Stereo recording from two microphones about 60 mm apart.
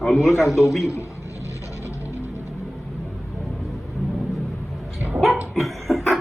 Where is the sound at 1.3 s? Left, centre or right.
Left.